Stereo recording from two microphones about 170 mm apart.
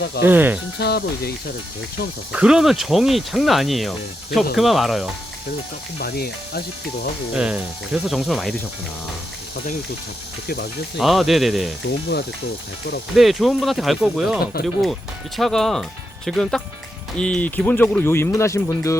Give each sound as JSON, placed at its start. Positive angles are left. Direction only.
{"t": 0.3, "sound": "speech", "side_deg": -10}
{"t": 0.8, "sound": "speech", "side_deg": 70}
{"t": 2.3, "sound": "speech", "side_deg": -5}
{"t": 6.0, "sound": "speech", "side_deg": 65}
{"t": 7.3, "sound": "speech", "side_deg": -5}
{"t": 10.9, "sound": "speech", "side_deg": 0}
{"t": 11.9, "sound": "speech", "side_deg": 70}
{"t": 13.1, "sound": "speech", "side_deg": 0}
{"t": 14.5, "sound": "speech", "side_deg": 60}
{"t": 15.4, "sound": "speech", "side_deg": 0}